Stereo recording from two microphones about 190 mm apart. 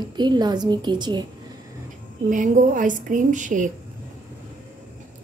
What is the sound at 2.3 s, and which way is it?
Speech, 45° right (ahead or behind).